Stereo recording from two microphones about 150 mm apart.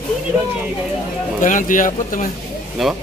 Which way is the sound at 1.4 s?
60° left (ahead or behind).